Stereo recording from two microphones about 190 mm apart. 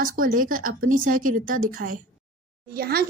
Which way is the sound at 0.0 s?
45° right (ahead or behind).